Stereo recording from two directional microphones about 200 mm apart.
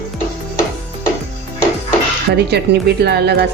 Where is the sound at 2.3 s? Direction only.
55° right (ahead or behind).